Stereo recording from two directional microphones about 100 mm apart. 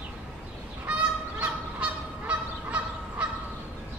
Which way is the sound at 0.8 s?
15° right (ahead or behind).